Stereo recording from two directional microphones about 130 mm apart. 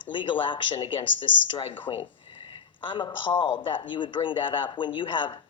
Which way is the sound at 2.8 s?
40° left (ahead or behind).